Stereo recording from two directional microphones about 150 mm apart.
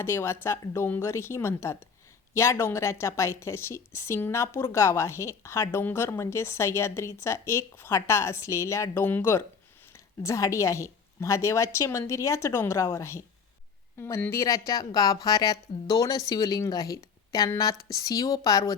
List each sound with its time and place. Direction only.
0.0 s a woman's voice: 15° left (ahead or behind)